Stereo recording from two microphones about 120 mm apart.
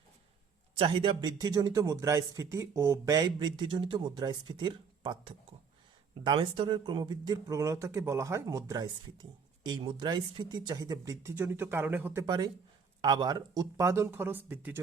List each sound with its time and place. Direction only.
0.8 s speech: 45° right (ahead or behind); by 12.2 s 15° right (ahead or behind)
12.2 s speech: 35° right (ahead or behind); by 14.8 s 15° right (ahead or behind)